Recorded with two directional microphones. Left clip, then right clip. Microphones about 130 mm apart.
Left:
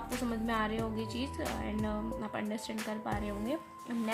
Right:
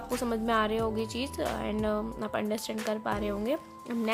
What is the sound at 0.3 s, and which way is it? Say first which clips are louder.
Speech: right 7 dB; 35° right (ahead or behind).